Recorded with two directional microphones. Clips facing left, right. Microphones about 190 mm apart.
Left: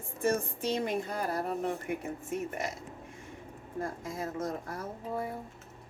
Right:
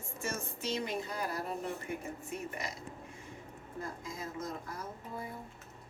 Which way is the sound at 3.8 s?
50° left (ahead or behind).